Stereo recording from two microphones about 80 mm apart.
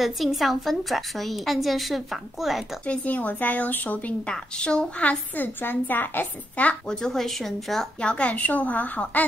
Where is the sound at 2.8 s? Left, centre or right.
Centre.